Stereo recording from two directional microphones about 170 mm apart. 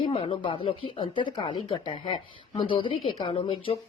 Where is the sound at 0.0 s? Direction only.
35° left (ahead or behind).